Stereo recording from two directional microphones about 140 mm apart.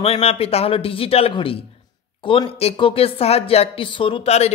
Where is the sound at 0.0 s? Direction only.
45° left (ahead or behind).